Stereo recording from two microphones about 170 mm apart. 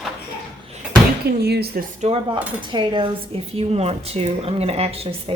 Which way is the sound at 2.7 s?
30° right (ahead or behind).